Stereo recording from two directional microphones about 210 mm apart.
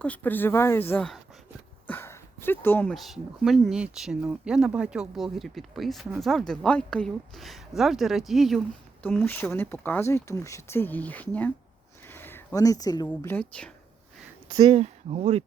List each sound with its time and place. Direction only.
0.0 s speech: 5° left (ahead or behind)
9.0 s speech: 10° left (ahead or behind)
12.0 s a sound: 10° left (ahead or behind)
13.1 s speech: 10° left (ahead or behind)
14.5 s speech: 20° right (ahead or behind)